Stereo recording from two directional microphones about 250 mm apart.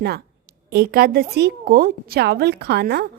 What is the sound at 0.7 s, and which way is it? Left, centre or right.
A woman's voice, right.